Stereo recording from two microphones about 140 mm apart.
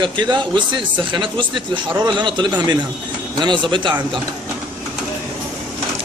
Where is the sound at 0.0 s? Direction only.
35° right (ahead or behind).